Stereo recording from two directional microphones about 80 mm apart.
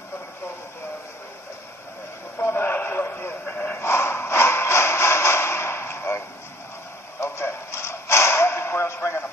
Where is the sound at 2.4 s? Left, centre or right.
Left.